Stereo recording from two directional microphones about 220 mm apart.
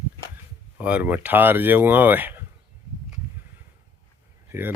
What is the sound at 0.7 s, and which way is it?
Speech, 5° right (ahead or behind).